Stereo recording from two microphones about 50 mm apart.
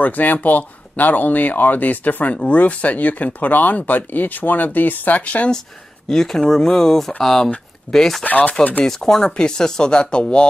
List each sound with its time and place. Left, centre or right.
0.0 s speech: left
6.0 s speech: centre
8.3 s speech: left
8.8 s speech: centre